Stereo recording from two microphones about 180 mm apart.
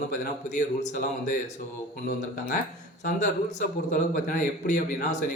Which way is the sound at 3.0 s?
45° left (ahead or behind).